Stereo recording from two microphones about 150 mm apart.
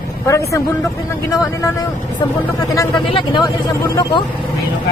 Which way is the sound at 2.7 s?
30° left (ahead or behind).